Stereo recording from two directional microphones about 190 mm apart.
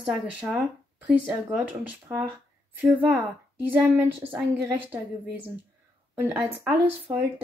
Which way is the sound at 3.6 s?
10° right (ahead or behind).